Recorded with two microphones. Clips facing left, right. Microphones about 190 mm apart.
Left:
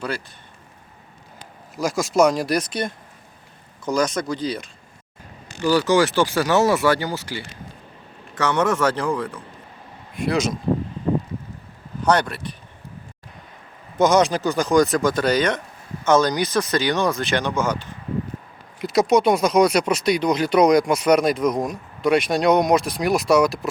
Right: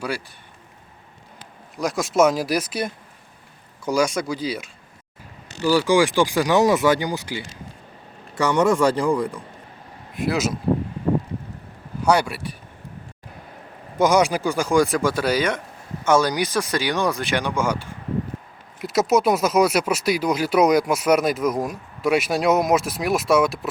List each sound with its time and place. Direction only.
1.7 s speech: centre (ahead or behind)
12.0 s speech: 10° right (ahead or behind)
14.0 s speech: 10° right (ahead or behind)